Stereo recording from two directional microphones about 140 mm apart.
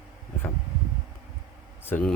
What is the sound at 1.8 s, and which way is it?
Speech, 10° left (ahead or behind).